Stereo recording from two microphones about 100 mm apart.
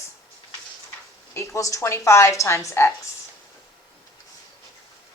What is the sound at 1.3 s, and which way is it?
A woman's voice, 30° left (ahead or behind).